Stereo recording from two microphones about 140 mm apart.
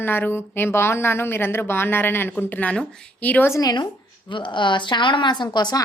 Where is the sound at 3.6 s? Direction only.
30° left (ahead or behind).